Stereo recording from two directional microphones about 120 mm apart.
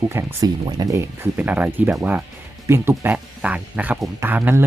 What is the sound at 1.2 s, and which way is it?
Speech, 15° right (ahead or behind).